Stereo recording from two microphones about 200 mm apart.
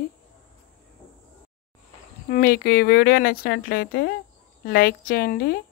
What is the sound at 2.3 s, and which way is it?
A woman's voice, 45° left (ahead or behind).